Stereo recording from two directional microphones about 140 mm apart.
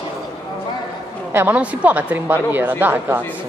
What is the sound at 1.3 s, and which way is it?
A woman's voice, 15° right (ahead or behind).